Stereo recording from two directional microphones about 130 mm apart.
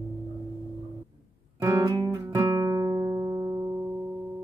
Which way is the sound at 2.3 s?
25° right (ahead or behind).